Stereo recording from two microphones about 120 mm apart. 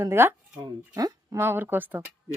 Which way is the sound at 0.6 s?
30° right (ahead or behind).